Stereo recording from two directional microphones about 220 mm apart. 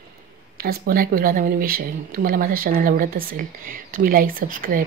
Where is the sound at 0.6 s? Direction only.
40° right (ahead or behind).